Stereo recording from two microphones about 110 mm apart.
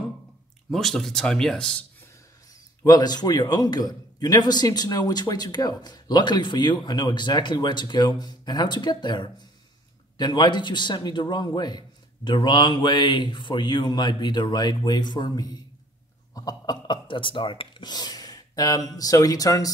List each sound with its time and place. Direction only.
0.7 s speech: centre (ahead or behind)
2.8 s a man's voice: 40° left (ahead or behind)